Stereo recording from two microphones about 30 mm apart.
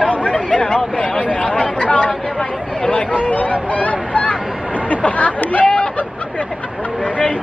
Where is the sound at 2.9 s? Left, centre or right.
Left.